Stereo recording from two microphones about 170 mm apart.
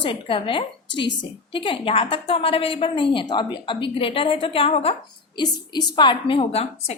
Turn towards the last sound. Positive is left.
turn(degrees=35)  # may be behind; listen again after turning